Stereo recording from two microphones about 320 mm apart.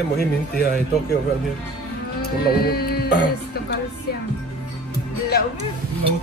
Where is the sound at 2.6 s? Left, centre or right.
Left.